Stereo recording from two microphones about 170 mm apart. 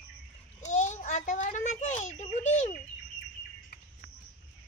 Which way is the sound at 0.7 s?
45° left (ahead or behind).